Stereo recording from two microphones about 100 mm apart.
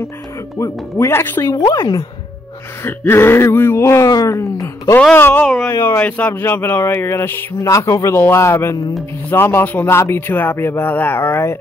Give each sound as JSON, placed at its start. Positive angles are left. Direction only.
{"t": 0.6, "sound": "speech", "side_deg": 25}
{"t": 1.5, "sound": "speech", "side_deg": 35}
{"t": 2.8, "sound": "speech", "side_deg": 25}
{"t": 5.1, "sound": "speech", "side_deg": 20}